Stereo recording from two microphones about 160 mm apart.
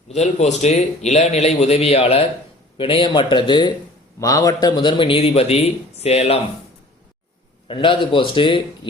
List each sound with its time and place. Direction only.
0.1 s a man's voice: 45° left (ahead or behind)
7.7 s a man's voice: 30° left (ahead or behind)